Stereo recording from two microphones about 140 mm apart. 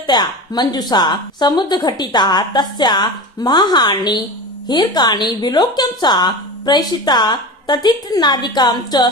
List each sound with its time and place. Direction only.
0.1 s a woman's voice: 30° left (ahead or behind)